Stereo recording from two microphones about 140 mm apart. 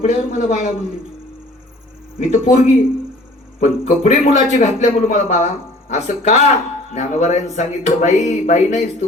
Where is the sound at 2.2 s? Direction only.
55° left (ahead or behind).